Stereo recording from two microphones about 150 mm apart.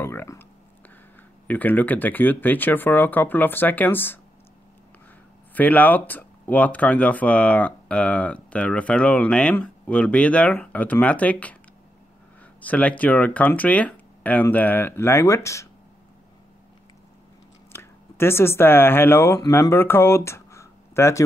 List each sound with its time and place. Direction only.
0.0 s speech: 15° left (ahead or behind)
1.5 s speech: 10° left (ahead or behind)
5.5 s speech: 10° left (ahead or behind)
12.5 s speech: 10° left (ahead or behind)
17.7 s speech: 15° left (ahead or behind)